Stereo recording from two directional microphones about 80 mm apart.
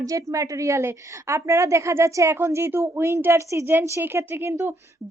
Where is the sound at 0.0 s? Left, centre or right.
Right.